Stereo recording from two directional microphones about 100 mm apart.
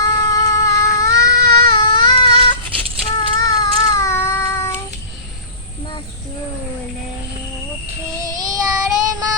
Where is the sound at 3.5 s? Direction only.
35° left (ahead or behind).